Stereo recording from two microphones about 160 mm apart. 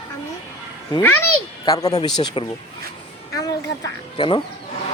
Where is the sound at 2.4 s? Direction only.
35° left (ahead or behind).